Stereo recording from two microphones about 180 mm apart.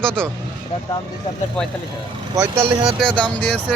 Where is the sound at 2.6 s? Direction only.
30° right (ahead or behind).